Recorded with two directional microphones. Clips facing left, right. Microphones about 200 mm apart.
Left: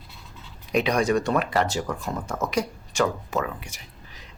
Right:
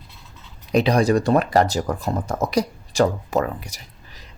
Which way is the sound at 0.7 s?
35° right (ahead or behind).